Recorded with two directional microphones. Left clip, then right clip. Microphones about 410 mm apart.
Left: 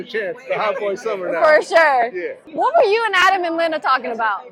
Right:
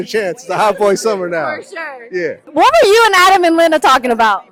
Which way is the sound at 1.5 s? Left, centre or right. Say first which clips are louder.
Left 10 dB; left.